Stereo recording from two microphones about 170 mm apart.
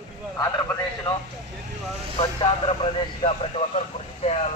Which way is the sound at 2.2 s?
30° left (ahead or behind).